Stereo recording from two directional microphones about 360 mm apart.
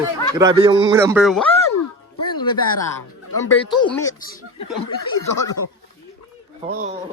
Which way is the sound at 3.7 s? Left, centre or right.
Centre.